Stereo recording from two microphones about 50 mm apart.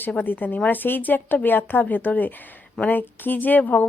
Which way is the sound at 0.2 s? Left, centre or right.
Left.